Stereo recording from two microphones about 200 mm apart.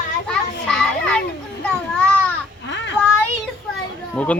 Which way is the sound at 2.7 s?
65° left (ahead or behind).